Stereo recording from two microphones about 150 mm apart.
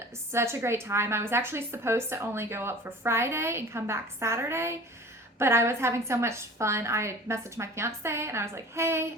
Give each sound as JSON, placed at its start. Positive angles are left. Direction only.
{"t": 0.3, "sound": "a woman's voice", "side_deg": -15}